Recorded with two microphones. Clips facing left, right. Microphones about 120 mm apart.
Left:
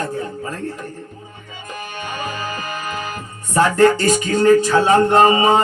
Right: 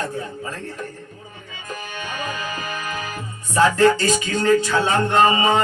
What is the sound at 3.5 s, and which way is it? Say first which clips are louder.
Music: left 2 dB; 45° left (ahead or behind).